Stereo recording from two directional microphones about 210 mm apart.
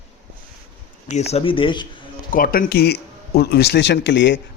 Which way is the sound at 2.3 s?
40° left (ahead or behind).